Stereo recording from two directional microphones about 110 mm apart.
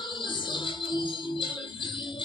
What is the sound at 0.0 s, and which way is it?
Music, 45° left (ahead or behind).